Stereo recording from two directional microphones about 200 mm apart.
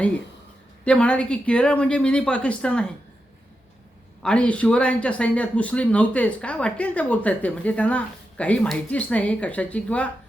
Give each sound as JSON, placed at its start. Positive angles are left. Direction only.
{"t": 0.9, "sound": "speech", "side_deg": 5}
{"t": 4.2, "sound": "speech", "side_deg": 5}